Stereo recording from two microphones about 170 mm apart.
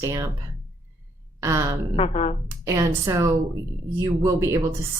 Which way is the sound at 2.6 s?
20° right (ahead or behind).